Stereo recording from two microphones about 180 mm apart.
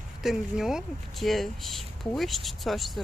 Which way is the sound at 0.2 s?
Centre (ahead or behind).